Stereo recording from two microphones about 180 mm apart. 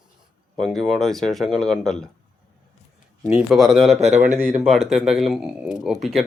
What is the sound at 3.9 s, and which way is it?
Speech, 40° right (ahead or behind).